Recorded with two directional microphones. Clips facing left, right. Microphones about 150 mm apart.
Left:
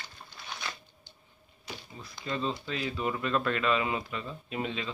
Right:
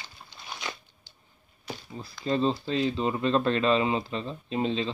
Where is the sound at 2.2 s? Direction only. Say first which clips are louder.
Right 7 dB; 30° right (ahead or behind).